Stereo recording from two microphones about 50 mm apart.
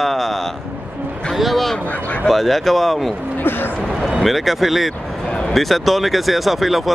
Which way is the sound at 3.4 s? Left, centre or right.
Left.